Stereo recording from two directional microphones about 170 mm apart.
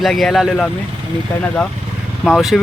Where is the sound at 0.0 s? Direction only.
Centre (ahead or behind).